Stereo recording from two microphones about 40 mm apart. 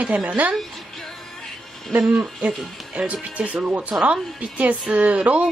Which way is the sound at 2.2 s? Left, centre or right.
Right.